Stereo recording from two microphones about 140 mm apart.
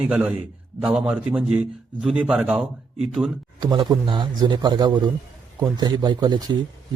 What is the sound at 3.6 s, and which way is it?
A man's voice, 30° right (ahead or behind).